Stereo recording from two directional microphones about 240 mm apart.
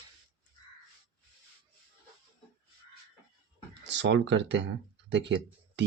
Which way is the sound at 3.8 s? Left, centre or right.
Right.